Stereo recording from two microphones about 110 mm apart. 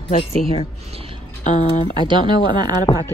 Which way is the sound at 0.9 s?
60° right (ahead or behind).